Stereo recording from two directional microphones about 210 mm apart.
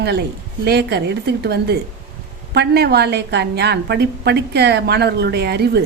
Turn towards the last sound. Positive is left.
turn(degrees=-50)  # may be behind; listen again after turning